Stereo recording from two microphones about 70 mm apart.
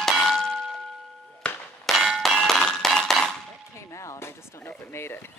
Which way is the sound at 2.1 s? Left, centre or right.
Centre.